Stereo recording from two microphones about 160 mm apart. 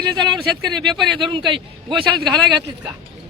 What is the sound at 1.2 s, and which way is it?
A man's voice, 30° right (ahead or behind).